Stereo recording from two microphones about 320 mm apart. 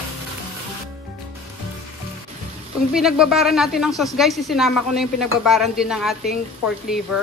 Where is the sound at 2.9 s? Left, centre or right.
Centre.